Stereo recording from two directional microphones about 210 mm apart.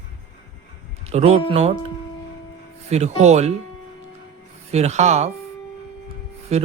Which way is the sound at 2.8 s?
30° right (ahead or behind).